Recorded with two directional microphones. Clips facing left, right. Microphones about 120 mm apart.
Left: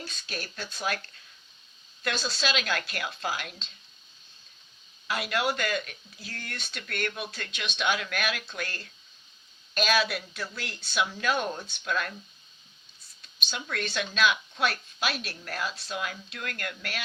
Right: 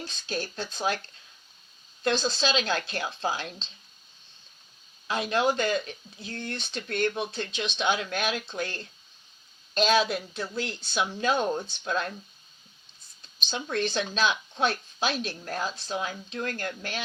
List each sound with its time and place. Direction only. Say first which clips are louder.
0.0 s speech: right 5 dB; 30° right (ahead or behind)
5.0 s a woman's voice: right 3 dB; 30° right (ahead or behind)
13.2 s a woman's voice: right 3 dB; 30° right (ahead or behind)